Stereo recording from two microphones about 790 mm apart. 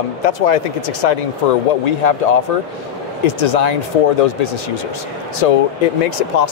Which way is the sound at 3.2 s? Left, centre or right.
Left.